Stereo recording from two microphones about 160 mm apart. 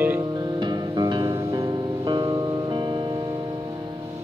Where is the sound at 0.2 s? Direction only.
25° right (ahead or behind).